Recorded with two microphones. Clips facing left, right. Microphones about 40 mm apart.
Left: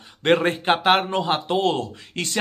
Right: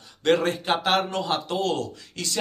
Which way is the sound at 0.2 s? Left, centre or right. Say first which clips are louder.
Left 3 dB; left.